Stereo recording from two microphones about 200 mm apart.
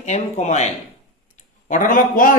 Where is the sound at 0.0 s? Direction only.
35° left (ahead or behind).